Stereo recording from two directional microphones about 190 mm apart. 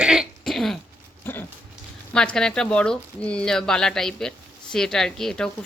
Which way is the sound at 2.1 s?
5° left (ahead or behind).